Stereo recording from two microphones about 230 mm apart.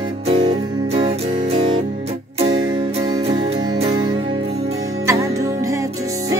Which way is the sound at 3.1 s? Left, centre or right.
Right.